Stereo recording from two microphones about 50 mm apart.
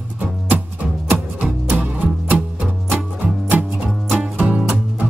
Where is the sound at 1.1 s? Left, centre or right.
Right.